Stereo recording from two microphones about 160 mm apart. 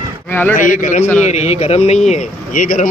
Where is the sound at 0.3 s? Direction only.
15° left (ahead or behind).